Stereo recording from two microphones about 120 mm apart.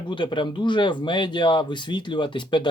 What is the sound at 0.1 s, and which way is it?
Speech, 40° left (ahead or behind).